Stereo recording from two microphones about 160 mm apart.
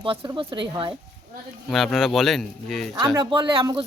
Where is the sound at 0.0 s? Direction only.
35° right (ahead or behind).